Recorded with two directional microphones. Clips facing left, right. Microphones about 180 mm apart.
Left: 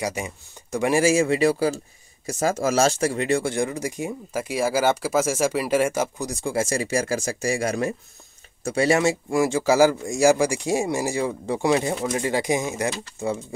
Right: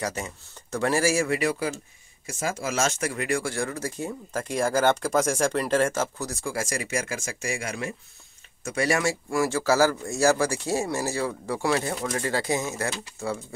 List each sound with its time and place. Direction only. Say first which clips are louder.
0.0 s speech: left 3 dB; 10° left (ahead or behind); by 7.9 s 40° left (ahead or behind)
8.6 s speech: left 5 dB; 25° left (ahead or behind)